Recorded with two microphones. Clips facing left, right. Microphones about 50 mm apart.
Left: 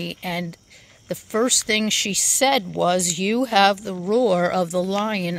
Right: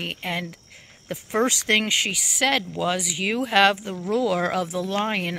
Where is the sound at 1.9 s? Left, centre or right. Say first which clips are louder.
Right 1 dB; centre.